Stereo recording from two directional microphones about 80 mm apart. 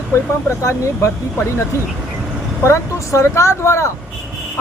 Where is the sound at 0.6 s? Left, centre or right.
Left.